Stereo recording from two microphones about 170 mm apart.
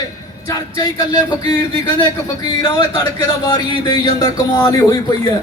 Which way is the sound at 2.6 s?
25° left (ahead or behind).